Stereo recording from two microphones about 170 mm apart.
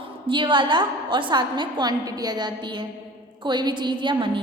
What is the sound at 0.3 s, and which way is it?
A woman's voice, 30° right (ahead or behind).